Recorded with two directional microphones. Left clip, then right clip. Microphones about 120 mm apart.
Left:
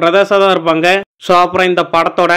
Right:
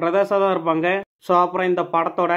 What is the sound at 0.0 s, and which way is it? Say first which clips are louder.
Speech: left 9 dB; 15° left (ahead or behind).